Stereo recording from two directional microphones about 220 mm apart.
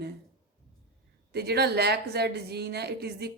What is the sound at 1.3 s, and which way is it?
Speech, 50° right (ahead or behind).